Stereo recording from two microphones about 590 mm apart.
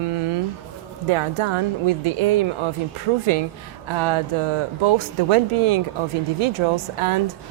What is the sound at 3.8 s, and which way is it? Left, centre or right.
Speech, right.